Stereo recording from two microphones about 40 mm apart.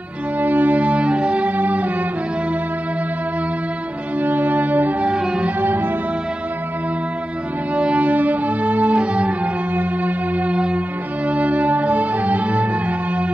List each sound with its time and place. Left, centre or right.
0.4 s music: right
1.6 s music: right
4.2 s music: right
5.0 s music: right
5.6 s music: right
7.7 s music: right
9.8 s music: right
10.5 s music: right